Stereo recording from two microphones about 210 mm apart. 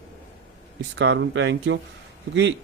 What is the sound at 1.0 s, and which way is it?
Speech, 55° right (ahead or behind).